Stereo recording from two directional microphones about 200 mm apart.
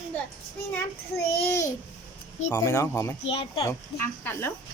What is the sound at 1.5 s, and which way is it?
Speech, 15° left (ahead or behind).